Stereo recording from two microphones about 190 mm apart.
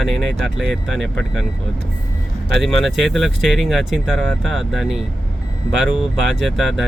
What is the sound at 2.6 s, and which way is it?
Speech, centre (ahead or behind).